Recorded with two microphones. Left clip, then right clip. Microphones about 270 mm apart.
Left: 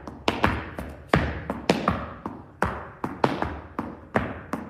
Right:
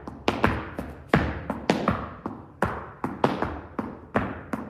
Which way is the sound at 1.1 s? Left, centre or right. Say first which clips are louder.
Even; left.